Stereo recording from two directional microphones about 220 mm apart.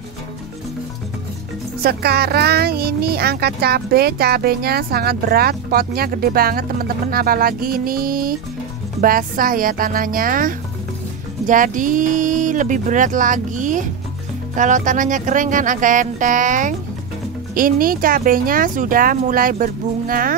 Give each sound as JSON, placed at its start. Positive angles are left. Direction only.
{"t": 1.8, "sound": "speech", "side_deg": -45}